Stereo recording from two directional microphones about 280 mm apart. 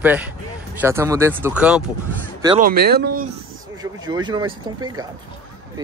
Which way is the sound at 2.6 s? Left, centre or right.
Right.